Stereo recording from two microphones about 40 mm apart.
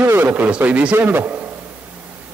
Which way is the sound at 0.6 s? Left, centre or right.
Right.